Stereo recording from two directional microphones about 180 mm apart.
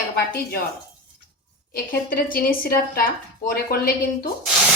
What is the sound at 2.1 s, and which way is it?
A woman's voice, 55° left (ahead or behind).